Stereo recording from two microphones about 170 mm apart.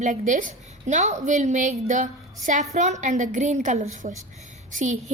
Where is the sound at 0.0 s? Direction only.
45° right (ahead or behind).